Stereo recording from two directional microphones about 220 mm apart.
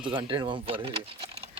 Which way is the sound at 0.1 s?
20° right (ahead or behind).